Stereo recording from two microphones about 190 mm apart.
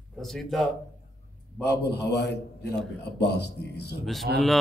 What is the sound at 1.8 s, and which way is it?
Speech, 65° left (ahead or behind).